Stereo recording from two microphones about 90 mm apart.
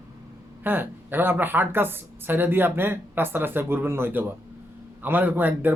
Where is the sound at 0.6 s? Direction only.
20° right (ahead or behind).